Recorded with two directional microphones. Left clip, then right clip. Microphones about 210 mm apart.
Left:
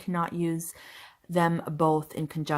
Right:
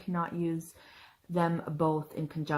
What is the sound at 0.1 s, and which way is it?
Speech, 35° left (ahead or behind).